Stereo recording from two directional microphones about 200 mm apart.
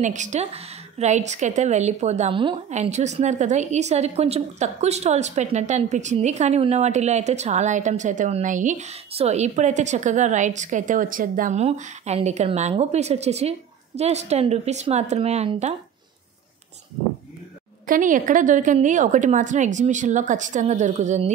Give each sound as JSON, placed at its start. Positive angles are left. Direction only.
{"t": 0.0, "sound": "a woman's voice", "side_deg": -35}
{"t": 17.8, "sound": "a woman's voice", "side_deg": -40}